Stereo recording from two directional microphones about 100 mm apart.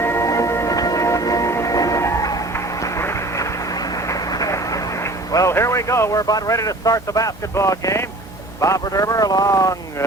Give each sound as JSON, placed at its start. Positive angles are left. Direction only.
{"t": 0.0, "sound": "music", "side_deg": 25}
{"t": 2.8, "sound": "a sound", "side_deg": 30}
{"t": 5.3, "sound": "speech", "side_deg": 30}